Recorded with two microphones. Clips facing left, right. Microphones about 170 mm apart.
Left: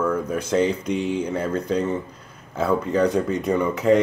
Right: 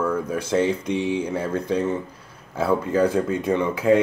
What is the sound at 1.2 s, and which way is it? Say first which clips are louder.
Speech: even; 10° right (ahead or behind).